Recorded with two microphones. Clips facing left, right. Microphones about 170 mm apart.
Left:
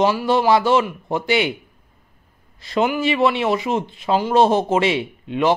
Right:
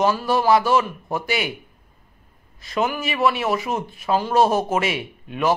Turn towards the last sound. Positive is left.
turn(degrees=25)  # may be behind; listen again after turning